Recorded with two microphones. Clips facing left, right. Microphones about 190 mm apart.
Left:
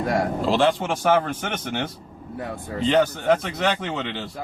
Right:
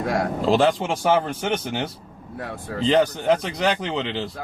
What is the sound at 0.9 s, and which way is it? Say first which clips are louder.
Speech: even; 10° right (ahead or behind).